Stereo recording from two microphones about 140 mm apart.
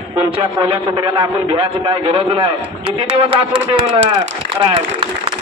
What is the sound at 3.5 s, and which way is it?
A man's voice, 40° right (ahead or behind).